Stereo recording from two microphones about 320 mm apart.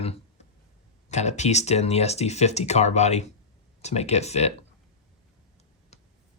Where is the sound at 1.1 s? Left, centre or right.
Left.